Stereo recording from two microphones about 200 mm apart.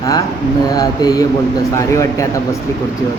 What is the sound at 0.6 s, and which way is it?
A man's voice, 20° left (ahead or behind).